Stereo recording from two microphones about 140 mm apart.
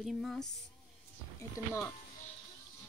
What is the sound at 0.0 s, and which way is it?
Speech, centre (ahead or behind).